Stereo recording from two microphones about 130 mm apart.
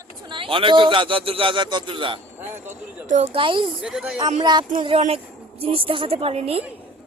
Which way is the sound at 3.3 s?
40° right (ahead or behind).